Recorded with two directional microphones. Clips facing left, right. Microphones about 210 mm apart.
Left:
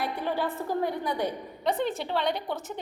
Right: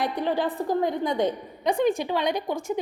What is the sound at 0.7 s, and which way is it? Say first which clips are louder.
A woman's voice: right 5 dB; 20° right (ahead or behind).